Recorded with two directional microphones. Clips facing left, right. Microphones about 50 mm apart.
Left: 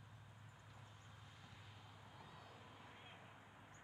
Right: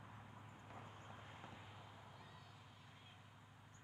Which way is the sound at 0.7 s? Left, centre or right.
Right.